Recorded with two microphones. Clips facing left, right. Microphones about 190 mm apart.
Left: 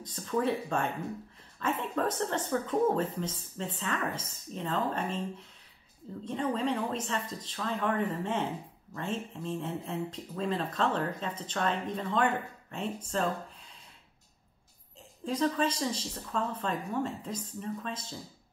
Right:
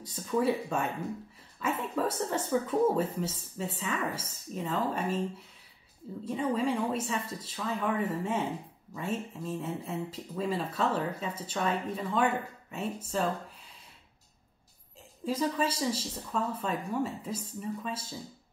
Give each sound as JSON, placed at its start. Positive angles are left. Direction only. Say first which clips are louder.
{"t": 0.0, "sound": "speech", "louder": "right 2 dB", "side_deg": -10}
{"t": 6.2, "sound": "speech", "louder": "right 1 dB", "side_deg": -10}
{"t": 15.2, "sound": "speech", "louder": "left 1 dB", "side_deg": -10}